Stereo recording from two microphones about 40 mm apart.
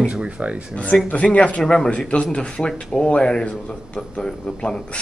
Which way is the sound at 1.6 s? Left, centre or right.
Centre.